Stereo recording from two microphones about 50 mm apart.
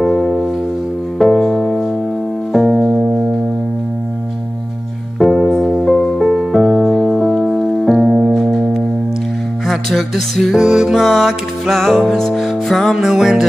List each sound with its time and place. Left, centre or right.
0.0 s music: centre
3.0 s music: centre
5.2 s piano: centre
5.9 s music: centre
9.8 s music: centre
12.9 s music: centre